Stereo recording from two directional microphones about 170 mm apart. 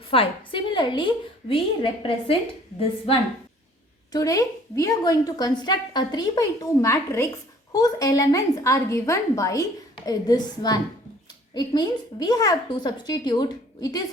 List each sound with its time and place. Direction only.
0.1 s a woman's voice: 30° left (ahead or behind)
4.1 s a woman's voice: 20° left (ahead or behind)